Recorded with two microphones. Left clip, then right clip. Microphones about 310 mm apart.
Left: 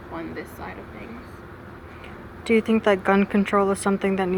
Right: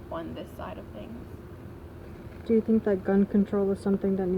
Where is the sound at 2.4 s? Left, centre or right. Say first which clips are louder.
Left 5 dB; left.